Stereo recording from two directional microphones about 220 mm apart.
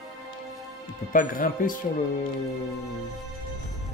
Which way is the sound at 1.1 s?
40° left (ahead or behind).